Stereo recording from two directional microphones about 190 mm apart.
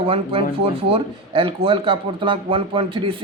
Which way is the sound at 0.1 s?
30° right (ahead or behind).